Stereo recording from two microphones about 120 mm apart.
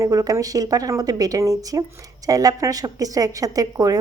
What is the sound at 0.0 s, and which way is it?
A woman's voice, 30° right (ahead or behind).